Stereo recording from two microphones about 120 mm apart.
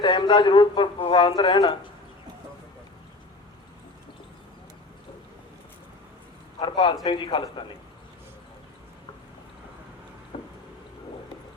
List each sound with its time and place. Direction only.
0.0 s speech: 40° left (ahead or behind)
6.6 s a man's voice: 45° left (ahead or behind)
10.3 s a sound: 45° left (ahead or behind)